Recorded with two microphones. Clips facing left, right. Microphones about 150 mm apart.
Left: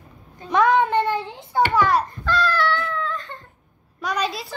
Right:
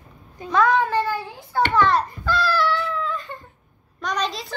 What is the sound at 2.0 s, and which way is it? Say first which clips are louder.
Baby cry: left 1 dB; 5° right (ahead or behind).